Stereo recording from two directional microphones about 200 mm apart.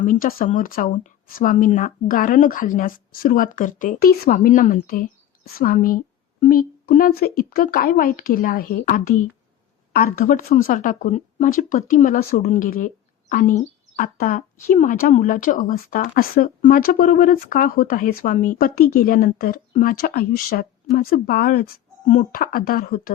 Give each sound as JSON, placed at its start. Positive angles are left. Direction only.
{"t": 0.0, "sound": "speech", "side_deg": 45}